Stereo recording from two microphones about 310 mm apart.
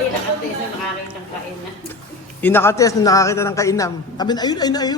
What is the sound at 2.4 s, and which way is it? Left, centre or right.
Speech, centre.